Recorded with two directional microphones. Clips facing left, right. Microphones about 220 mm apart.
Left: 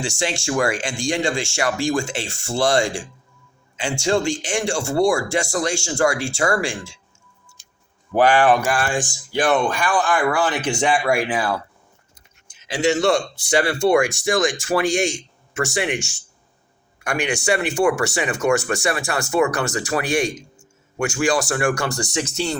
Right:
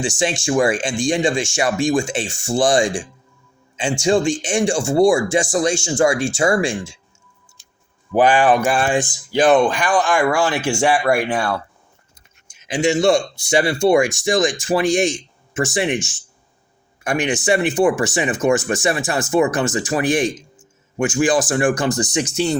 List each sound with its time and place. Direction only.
0.0 s speech: 20° right (ahead or behind)
8.1 s speech: 15° right (ahead or behind); by 11.6 s 5° left (ahead or behind)
12.5 s a man's voice: 15° right (ahead or behind)